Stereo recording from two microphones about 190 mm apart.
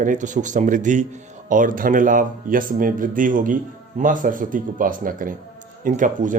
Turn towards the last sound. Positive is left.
turn(degrees=-45)  # may be behind; listen again after turning